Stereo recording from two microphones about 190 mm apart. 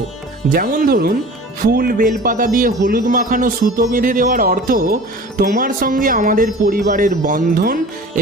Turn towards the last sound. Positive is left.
turn(degrees=-50)  # may be behind; listen again after turning